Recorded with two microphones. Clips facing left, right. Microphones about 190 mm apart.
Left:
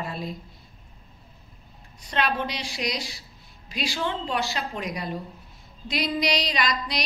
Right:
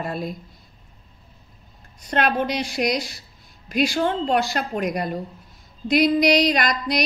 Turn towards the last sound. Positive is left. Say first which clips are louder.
# right 5 dB
turn(degrees=-50)  # may be behind; listen again after turning